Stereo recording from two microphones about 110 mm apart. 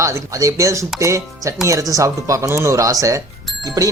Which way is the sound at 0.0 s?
30° right (ahead or behind).